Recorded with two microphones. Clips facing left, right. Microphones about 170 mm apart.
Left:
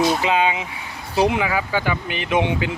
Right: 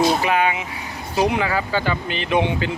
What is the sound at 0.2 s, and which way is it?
Speech, 20° left (ahead or behind).